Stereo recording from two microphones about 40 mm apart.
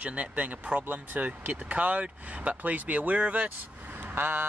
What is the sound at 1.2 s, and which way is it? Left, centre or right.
Speech, right.